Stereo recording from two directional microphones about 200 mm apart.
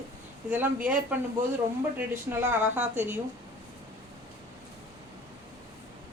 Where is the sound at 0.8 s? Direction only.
5° right (ahead or behind).